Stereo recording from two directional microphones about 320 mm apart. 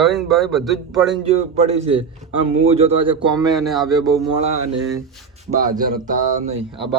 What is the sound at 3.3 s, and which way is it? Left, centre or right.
Speech, centre.